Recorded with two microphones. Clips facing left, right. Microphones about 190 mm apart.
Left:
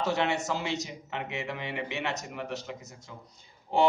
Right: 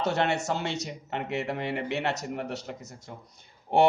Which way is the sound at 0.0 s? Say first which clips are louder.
Right 2 dB; 65° right (ahead or behind).